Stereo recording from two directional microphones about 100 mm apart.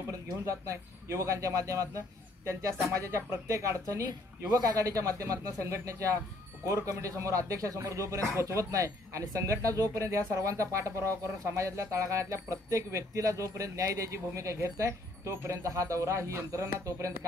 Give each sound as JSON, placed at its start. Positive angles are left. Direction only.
{"t": 0.5, "sound": "speech", "side_deg": -30}